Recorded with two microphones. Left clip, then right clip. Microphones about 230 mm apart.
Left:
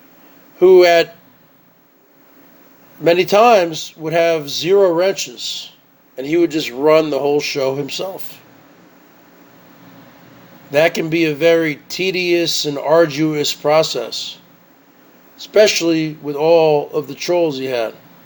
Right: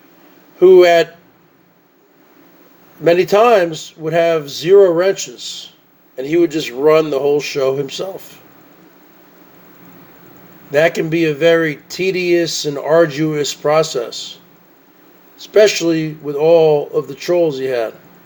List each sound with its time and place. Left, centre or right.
0.6 s speech: centre
3.0 s speech: centre
10.7 s speech: centre
15.4 s speech: centre